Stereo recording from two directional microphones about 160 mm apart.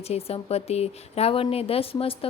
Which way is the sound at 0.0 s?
40° left (ahead or behind).